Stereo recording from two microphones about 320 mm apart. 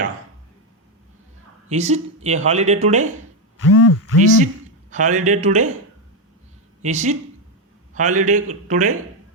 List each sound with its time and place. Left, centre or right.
1.7 s speech: right
3.6 s speech: left
4.2 s speech: right
6.8 s speech: right